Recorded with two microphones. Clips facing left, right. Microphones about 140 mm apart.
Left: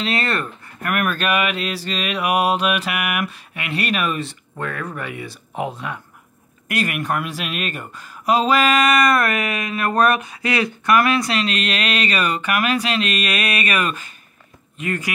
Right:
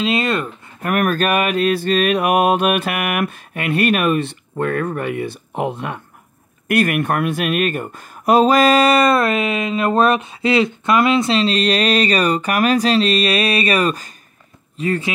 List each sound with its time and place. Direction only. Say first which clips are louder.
0.0 s speech: right 4 dB; 20° right (ahead or behind)
0.8 s mantra: right 4 dB; 40° right (ahead or behind); by 5.9 s 60° right (ahead or behind)
6.7 s speech: right 6 dB; 55° right (ahead or behind); by 15.0 s 30° right (ahead or behind)